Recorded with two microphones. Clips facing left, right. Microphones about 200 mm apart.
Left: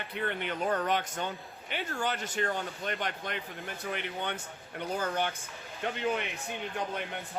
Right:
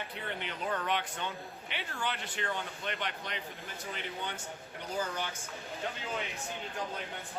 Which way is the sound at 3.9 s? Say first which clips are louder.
Left 4 dB; 60° left (ahead or behind).